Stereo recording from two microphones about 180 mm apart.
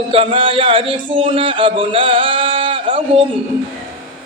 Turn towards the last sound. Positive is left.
turn(degrees=-30)  # may be behind; listen again after turning